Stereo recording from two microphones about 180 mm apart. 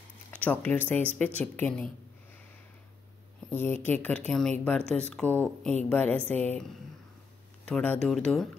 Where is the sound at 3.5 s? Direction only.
10° left (ahead or behind).